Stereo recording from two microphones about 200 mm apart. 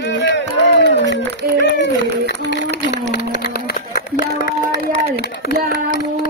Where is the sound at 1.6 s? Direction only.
60° left (ahead or behind).